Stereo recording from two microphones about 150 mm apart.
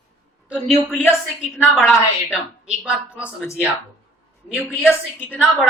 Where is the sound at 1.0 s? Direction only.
5° right (ahead or behind).